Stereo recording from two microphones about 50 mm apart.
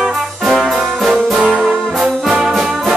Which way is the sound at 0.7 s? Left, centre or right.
Centre.